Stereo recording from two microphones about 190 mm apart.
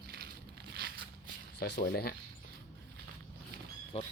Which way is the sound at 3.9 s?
35° left (ahead or behind).